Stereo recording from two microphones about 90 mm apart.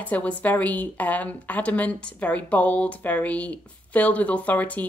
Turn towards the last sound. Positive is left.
turn(degrees=20)  # may be behind; listen again after turning